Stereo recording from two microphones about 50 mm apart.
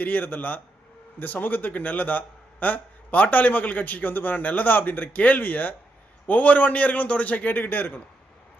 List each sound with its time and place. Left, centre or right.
0.0 s a man's voice: left